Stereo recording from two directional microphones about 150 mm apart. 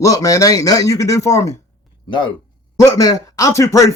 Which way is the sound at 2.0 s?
30° left (ahead or behind).